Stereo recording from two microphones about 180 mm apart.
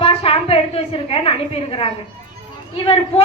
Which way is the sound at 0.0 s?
30° left (ahead or behind).